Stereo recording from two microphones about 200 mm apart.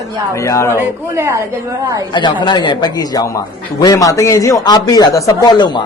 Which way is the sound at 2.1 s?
20° left (ahead or behind).